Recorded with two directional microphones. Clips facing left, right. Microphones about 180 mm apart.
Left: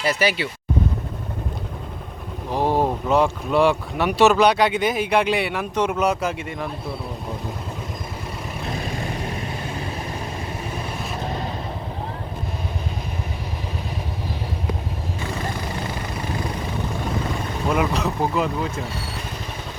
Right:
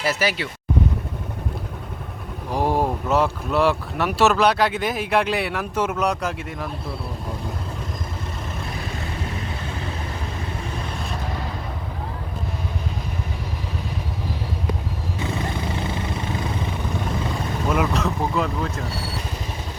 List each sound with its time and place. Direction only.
0.0 s speech: centre (ahead or behind)
2.5 s vehicle: 10° right (ahead or behind)
3.1 s speech: 5° right (ahead or behind)
11.2 s vehicle: 25° left (ahead or behind)
17.7 s speech: centre (ahead or behind)